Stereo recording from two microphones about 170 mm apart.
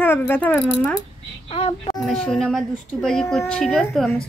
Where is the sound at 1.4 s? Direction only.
35° left (ahead or behind).